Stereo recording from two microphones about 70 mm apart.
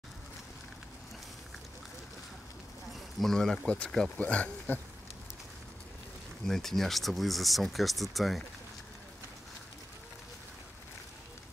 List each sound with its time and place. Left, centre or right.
3.2 s speech: centre
4.2 s speech: centre
6.4 s speech: centre